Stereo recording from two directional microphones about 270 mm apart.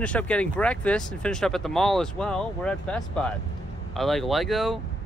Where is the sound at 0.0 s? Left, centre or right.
Centre.